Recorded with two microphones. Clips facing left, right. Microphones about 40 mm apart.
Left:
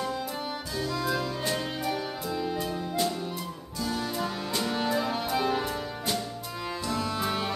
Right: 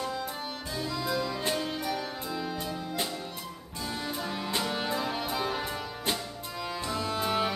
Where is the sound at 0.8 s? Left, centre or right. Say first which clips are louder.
Left 3 dB; centre.